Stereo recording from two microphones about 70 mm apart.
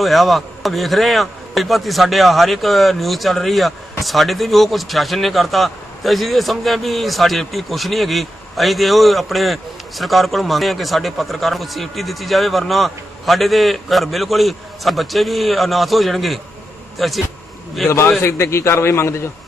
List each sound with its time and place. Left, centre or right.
0.0 s speech: centre
17.8 s a man's voice: left